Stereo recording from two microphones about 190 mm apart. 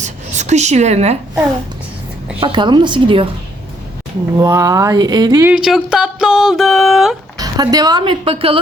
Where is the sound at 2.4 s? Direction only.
25° right (ahead or behind).